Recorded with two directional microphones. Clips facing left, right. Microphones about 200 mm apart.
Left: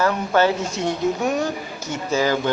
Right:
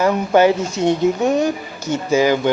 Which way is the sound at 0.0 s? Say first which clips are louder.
Right 5 dB; 15° right (ahead or behind).